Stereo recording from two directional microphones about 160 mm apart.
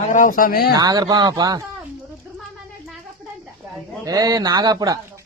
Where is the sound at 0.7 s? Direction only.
25° right (ahead or behind).